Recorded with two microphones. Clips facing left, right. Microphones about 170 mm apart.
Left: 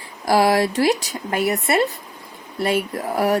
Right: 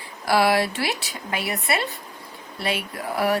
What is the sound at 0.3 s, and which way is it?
Speech, 40° left (ahead or behind).